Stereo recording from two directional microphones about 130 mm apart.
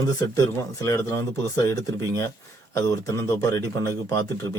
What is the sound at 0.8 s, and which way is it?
Speech, 25° left (ahead or behind).